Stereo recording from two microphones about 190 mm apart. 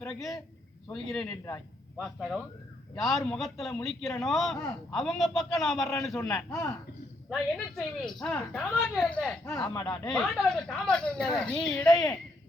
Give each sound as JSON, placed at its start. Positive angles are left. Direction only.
{"t": 0.0, "sound": "a man's voice", "side_deg": 5}
{"t": 1.5, "sound": "a man's voice", "side_deg": 15}
{"t": 2.1, "sound": "a man's voice", "side_deg": 0}
{"t": 7.8, "sound": "a man's voice", "side_deg": 5}
{"t": 9.7, "sound": "speech", "side_deg": 20}
{"t": 10.1, "sound": "a man's voice", "side_deg": 5}
{"t": 11.9, "sound": "speech", "side_deg": 20}